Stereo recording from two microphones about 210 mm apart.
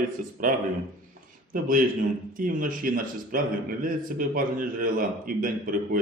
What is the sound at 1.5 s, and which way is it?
Speech, 40° right (ahead or behind).